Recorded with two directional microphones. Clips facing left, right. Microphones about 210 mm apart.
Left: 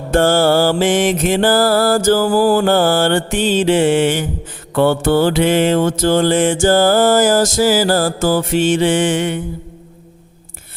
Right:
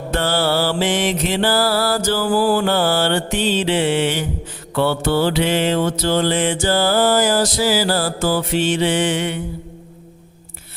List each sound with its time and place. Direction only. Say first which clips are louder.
0.1 s mantra: left 7 dB; 45° left (ahead or behind)